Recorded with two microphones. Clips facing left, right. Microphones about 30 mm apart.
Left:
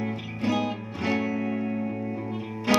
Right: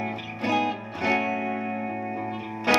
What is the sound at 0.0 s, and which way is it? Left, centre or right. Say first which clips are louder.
Music: even; centre.